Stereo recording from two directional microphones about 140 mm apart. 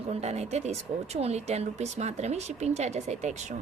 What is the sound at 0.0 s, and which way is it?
Speech, 50° right (ahead or behind).